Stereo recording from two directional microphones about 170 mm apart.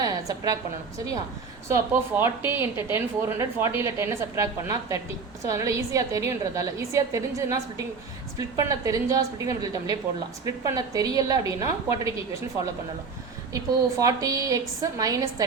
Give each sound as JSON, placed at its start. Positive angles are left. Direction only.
{"t": 0.0, "sound": "a sound", "side_deg": -20}
{"t": 1.6, "sound": "a woman's voice", "side_deg": -15}
{"t": 14.0, "sound": "a woman's voice", "side_deg": -20}